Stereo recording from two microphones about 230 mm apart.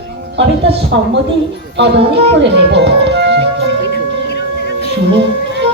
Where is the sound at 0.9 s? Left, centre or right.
Right.